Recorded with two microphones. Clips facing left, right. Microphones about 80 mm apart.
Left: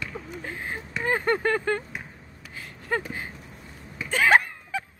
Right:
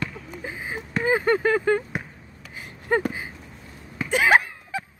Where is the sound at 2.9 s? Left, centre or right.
Right.